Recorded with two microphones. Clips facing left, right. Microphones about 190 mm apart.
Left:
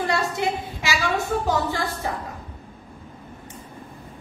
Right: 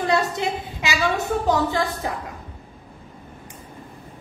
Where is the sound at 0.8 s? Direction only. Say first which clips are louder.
Right 2 dB; 20° right (ahead or behind).